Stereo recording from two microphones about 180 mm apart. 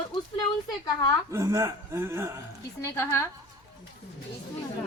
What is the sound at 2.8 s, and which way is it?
Speech, 15° left (ahead or behind).